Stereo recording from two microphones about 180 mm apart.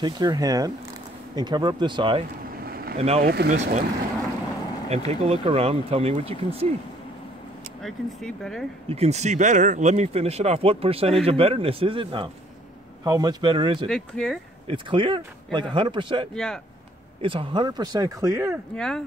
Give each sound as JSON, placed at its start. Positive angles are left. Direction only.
{"t": 0.0, "sound": "speech", "side_deg": -20}
{"t": 2.6, "sound": "vehicle", "side_deg": -55}
{"t": 3.2, "sound": "speech", "side_deg": -55}
{"t": 3.5, "sound": "speech", "side_deg": -40}
{"t": 4.8, "sound": "speech", "side_deg": -35}
{"t": 7.8, "sound": "speech", "side_deg": 5}
{"t": 8.8, "sound": "speech", "side_deg": -35}
{"t": 13.8, "sound": "speech", "side_deg": 5}
{"t": 14.7, "sound": "speech", "side_deg": -30}
{"t": 16.3, "sound": "speech", "side_deg": 5}
{"t": 17.2, "sound": "speech", "side_deg": -30}
{"t": 18.8, "sound": "speech", "side_deg": 5}